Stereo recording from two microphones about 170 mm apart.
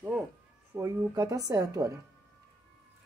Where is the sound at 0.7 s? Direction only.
20° right (ahead or behind).